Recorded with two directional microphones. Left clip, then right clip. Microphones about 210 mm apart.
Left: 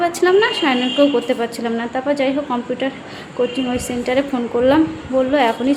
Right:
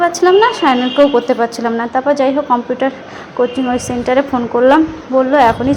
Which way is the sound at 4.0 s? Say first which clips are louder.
Right 5 dB; 5° right (ahead or behind).